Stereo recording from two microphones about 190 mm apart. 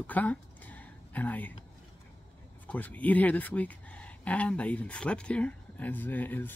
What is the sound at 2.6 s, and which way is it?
Speech, 10° left (ahead or behind).